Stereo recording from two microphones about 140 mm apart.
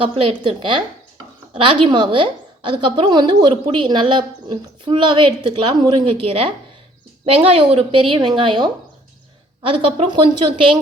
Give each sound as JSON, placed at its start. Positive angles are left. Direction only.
{"t": 0.0, "sound": "a woman's voice", "side_deg": -40}
{"t": 1.8, "sound": "a woman's voice", "side_deg": -35}